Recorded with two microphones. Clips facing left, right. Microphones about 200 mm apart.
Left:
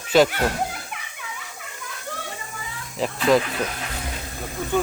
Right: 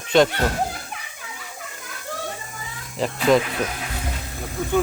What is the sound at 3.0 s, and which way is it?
Speech, centre (ahead or behind).